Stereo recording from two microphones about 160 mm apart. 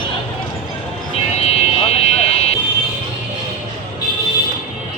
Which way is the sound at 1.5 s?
40° left (ahead or behind).